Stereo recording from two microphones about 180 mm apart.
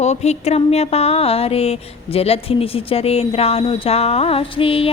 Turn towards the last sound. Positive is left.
turn(degrees=30)  # may be behind; listen again after turning